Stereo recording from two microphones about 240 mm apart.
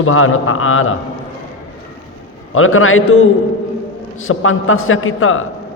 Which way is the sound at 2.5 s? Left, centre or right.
Left.